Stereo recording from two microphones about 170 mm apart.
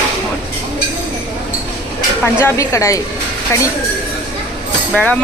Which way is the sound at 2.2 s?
15° left (ahead or behind).